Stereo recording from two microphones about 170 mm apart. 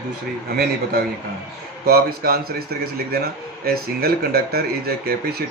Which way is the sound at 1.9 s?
65° right (ahead or behind).